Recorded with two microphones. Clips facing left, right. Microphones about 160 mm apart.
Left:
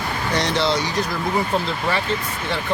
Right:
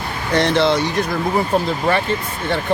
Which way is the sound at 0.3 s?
55° right (ahead or behind).